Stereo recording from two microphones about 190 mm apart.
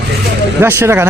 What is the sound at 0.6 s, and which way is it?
Speech, 10° right (ahead or behind).